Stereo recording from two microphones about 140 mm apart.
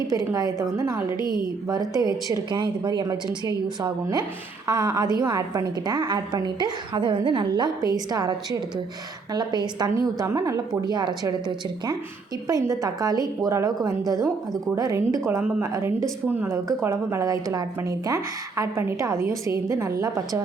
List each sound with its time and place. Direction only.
0.1 s a woman's voice: 25° right (ahead or behind)